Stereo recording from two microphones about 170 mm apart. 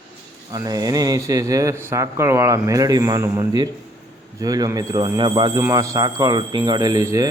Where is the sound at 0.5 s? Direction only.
25° right (ahead or behind).